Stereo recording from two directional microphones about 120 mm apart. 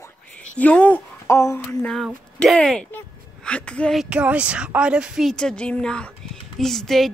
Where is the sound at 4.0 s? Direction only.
10° right (ahead or behind).